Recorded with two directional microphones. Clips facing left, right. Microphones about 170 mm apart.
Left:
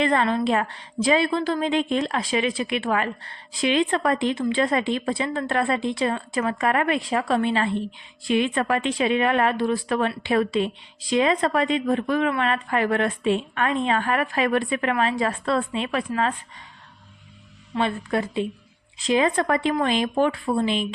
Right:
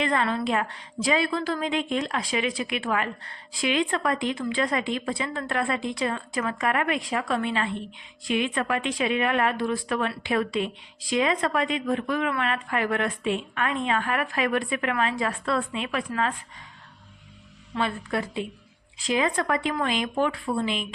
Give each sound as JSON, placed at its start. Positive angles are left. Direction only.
{"t": 0.0, "sound": "a woman's voice", "side_deg": 30}
{"t": 17.7, "sound": "a woman's voice", "side_deg": 25}